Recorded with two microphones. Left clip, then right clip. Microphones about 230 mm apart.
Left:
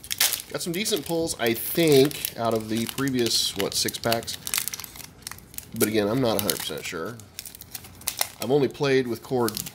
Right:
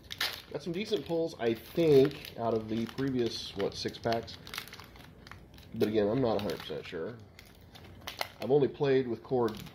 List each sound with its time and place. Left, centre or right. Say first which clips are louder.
0.5 s speech: left 7 dB; left
4.1 s crumpling: left 7 dB; centre
5.8 s speech: left 5 dB; left
8.5 s speech: left 4 dB; left